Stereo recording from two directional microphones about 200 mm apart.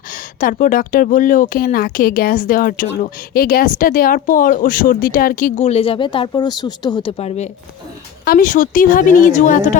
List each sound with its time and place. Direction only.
0.1 s speech: 45° left (ahead or behind)
8.2 s a woman's voice: 45° left (ahead or behind)